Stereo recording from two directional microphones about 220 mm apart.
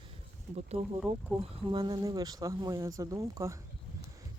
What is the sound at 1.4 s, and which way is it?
Speech, 20° right (ahead or behind).